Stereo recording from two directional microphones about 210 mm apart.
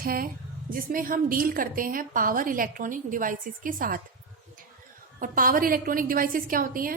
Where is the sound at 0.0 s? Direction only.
45° right (ahead or behind).